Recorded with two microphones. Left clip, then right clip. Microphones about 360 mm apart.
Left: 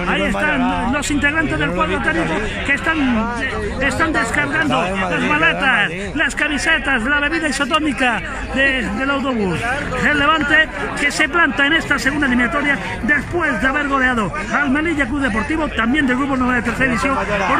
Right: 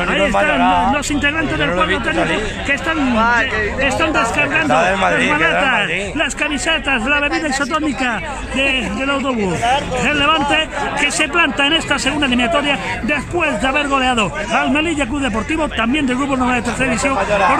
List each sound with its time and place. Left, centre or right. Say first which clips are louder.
0.2 s a man's voice: right 4 dB; right
1.2 s a man's voice: left 1 dB; centre
3.2 s speech: right 8 dB; right
3.8 s a man's voice: right 1 dB; centre
8.5 s a man's voice: even; centre